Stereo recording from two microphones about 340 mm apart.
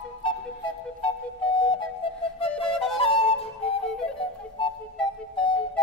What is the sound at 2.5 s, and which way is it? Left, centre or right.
Flute, centre.